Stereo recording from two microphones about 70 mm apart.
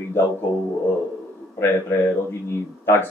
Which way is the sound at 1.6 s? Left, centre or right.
Left.